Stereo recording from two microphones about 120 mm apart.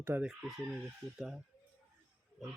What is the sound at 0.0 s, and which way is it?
Fowl, 20° right (ahead or behind).